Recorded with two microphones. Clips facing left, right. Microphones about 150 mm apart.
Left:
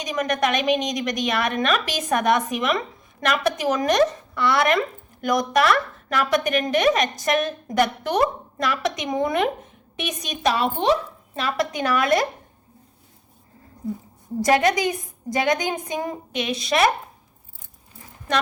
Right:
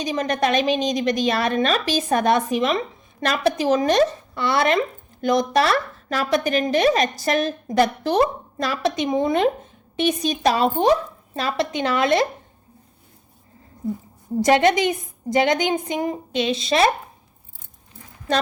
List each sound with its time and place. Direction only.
0.0 s a woman's voice: 30° right (ahead or behind)
14.4 s a woman's voice: 25° right (ahead or behind)
18.3 s a woman's voice: 30° right (ahead or behind)